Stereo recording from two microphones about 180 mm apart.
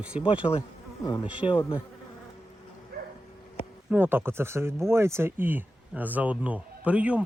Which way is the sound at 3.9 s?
10° right (ahead or behind).